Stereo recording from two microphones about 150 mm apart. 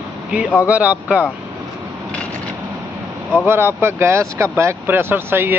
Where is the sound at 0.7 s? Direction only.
10° right (ahead or behind).